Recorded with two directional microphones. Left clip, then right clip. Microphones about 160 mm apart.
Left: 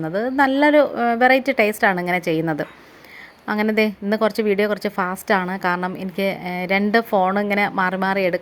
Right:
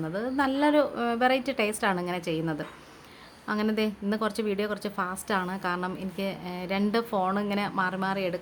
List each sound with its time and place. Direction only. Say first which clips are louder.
0.0 s a woman's voice: left 9 dB; 30° left (ahead or behind)